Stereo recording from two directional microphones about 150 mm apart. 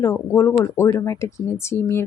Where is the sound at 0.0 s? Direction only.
20° left (ahead or behind).